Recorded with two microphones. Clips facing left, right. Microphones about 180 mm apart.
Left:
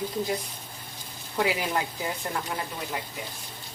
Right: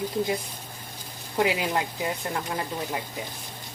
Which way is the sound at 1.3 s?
20° right (ahead or behind).